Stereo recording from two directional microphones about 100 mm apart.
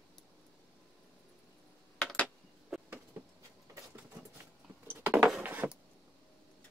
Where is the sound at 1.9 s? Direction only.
15° left (ahead or behind).